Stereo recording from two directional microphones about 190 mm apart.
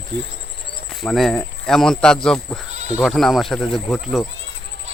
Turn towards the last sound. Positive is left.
turn(degrees=5)  # may be behind; listen again after turning